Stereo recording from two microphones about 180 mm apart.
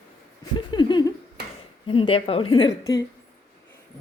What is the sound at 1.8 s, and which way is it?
A woman's voice, 30° left (ahead or behind).